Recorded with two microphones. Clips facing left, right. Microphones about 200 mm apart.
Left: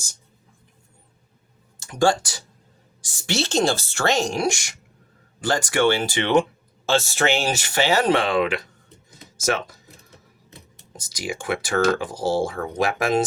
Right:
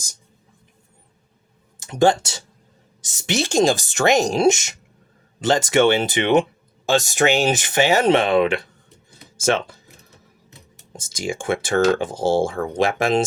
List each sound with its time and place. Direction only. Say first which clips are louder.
1.8 s a woman's voice: right 3 dB; 20° right (ahead or behind)
9.0 s music: right 4 dB; 30° right (ahead or behind)
10.9 s speech: right 4 dB; 25° right (ahead or behind)